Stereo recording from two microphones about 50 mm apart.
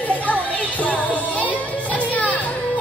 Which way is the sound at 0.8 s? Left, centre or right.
Left.